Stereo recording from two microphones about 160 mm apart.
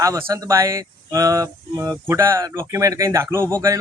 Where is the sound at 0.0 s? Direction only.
20° right (ahead or behind).